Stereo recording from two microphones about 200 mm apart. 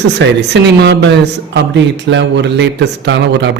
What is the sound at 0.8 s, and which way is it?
A man's voice, 60° right (ahead or behind).